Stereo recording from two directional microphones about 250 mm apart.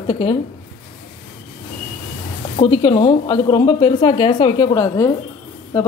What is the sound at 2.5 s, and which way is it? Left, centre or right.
A woman's voice, centre.